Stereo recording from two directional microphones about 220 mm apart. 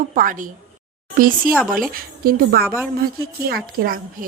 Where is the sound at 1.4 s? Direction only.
Centre (ahead or behind).